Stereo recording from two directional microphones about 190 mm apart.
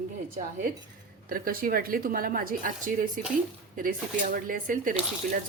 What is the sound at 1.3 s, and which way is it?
Speech, 50° right (ahead or behind).